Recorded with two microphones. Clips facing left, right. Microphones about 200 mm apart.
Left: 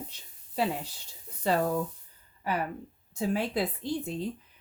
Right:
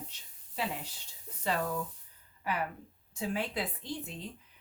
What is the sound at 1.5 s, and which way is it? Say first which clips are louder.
Speech: left 6 dB; 40° left (ahead or behind).